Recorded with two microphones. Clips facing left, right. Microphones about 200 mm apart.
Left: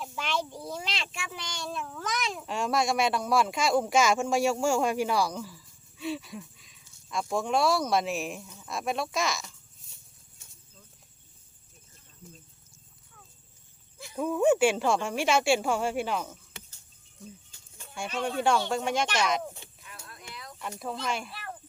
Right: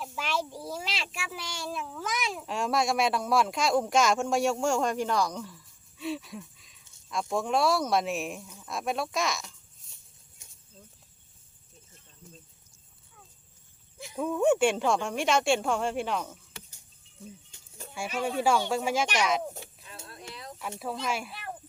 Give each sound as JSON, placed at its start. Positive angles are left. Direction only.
{"t": 0.0, "sound": "a child's voice", "side_deg": 0}
{"t": 14.2, "sound": "speech", "side_deg": 0}
{"t": 17.5, "sound": "music", "side_deg": -20}
{"t": 17.9, "sound": "speech", "side_deg": -5}
{"t": 19.5, "sound": "a sound", "side_deg": -30}
{"t": 20.6, "sound": "speech", "side_deg": -5}